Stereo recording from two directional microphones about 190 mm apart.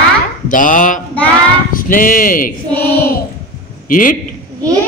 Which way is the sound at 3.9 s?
45° left (ahead or behind).